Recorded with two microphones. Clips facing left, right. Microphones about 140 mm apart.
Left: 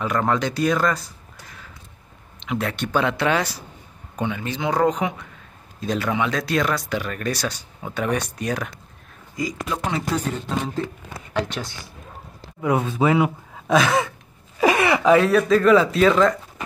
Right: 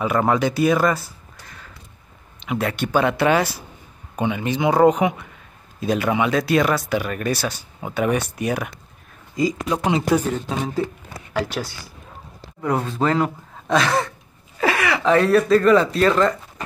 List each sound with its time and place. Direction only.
0.0 s speech: 10° right (ahead or behind)
9.4 s speech: 25° right (ahead or behind)
11.3 s speech: 5° right (ahead or behind)
14.6 s a sound: 20° left (ahead or behind)
15.0 s speech: centre (ahead or behind)